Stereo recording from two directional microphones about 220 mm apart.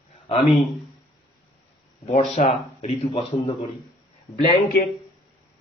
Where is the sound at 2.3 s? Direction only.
30° left (ahead or behind).